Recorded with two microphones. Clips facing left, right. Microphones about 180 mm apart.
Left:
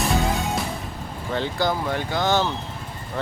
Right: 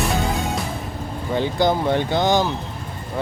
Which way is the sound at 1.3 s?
15° right (ahead or behind).